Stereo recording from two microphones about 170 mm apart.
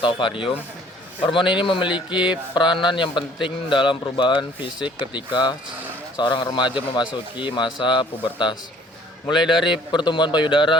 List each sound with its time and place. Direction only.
0.0 s a man's voice: 30° left (ahead or behind)
2.1 s mantra: 5° right (ahead or behind)
2.6 s a man's voice: 25° left (ahead or behind)
9.6 s a man's voice: 5° right (ahead or behind)
9.9 s a man's voice: 25° left (ahead or behind)